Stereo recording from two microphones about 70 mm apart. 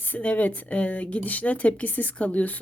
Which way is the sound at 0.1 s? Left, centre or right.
Left.